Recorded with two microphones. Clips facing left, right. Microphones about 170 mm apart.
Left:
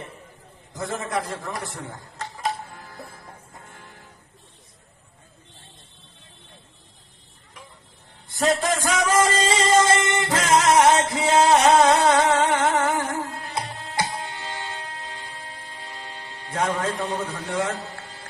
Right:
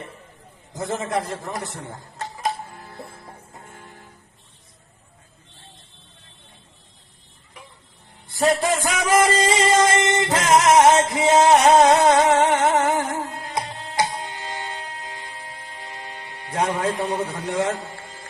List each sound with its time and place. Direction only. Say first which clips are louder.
0.7 s a man's voice: right 3 dB; 20° right (ahead or behind)
2.9 s music: right 2 dB; 25° right (ahead or behind)
8.4 s music: right 2 dB; 15° right (ahead or behind)
10.0 s music: right 3 dB; 25° right (ahead or behind)
14.5 s train: right 2 dB; 15° right (ahead or behind)
16.0 s music: right 2 dB; 15° right (ahead or behind)